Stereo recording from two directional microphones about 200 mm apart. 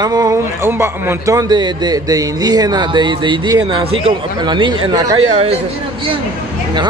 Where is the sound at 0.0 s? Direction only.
20° right (ahead or behind).